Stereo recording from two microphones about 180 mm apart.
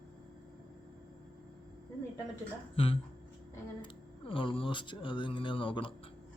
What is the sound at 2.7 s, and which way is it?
Speech, 30° left (ahead or behind).